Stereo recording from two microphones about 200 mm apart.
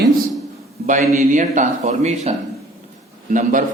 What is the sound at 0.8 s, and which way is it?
A man's voice, 40° right (ahead or behind).